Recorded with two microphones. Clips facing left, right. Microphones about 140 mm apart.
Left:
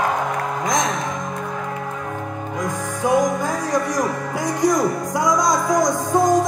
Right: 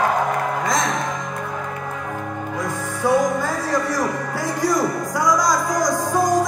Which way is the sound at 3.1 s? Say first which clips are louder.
Even; 15° left (ahead or behind).